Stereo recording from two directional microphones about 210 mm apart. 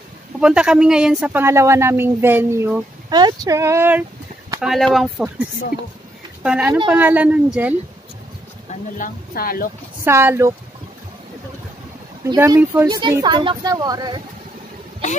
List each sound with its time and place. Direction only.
0.4 s a woman's voice: 5° right (ahead or behind)
6.4 s a woman's voice: 5° right (ahead or behind)
8.9 s speech: 40° left (ahead or behind)
10.0 s a woman's voice: 10° right (ahead or behind)
12.3 s speech: 15° right (ahead or behind)